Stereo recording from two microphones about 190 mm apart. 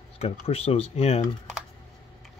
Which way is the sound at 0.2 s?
30° left (ahead or behind).